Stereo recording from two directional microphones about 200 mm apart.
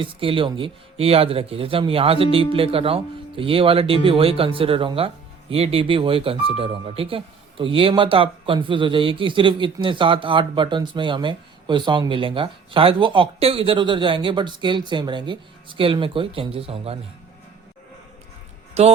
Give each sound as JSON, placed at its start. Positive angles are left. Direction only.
{"t": 0.0, "sound": "a man's voice", "side_deg": -25}
{"t": 18.7, "sound": "speech", "side_deg": -30}